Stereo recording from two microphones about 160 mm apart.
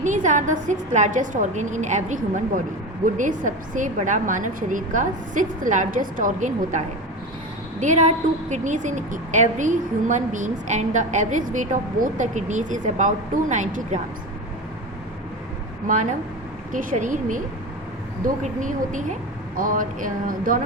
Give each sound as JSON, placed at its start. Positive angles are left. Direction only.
{"t": 0.0, "sound": "a woman's voice", "side_deg": -50}
{"t": 15.9, "sound": "a woman's voice", "side_deg": -50}
{"t": 18.4, "sound": "a woman's voice", "side_deg": -50}